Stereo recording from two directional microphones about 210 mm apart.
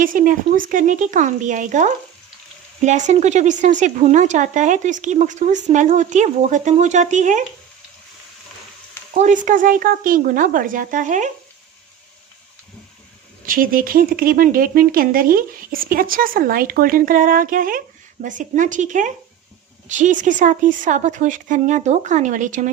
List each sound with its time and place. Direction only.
0.0 s speech: 40° right (ahead or behind)
9.1 s speech: 35° right (ahead or behind)
13.4 s speech: 40° right (ahead or behind)